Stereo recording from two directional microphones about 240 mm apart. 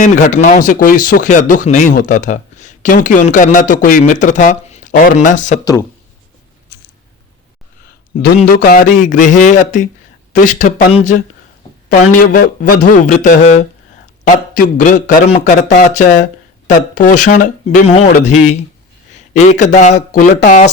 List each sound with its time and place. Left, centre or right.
0.0 s speech: left
8.1 s speech: left
11.9 s speech: left